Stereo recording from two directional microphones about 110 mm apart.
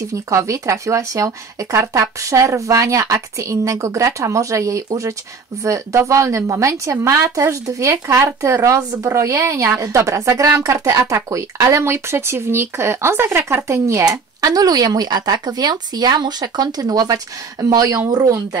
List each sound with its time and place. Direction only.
0.1 s a woman's voice: 30° right (ahead or behind)